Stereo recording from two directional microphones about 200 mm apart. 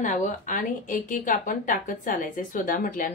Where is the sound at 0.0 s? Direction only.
40° left (ahead or behind).